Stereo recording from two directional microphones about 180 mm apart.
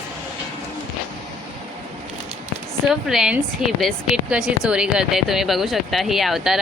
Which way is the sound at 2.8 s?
5° right (ahead or behind).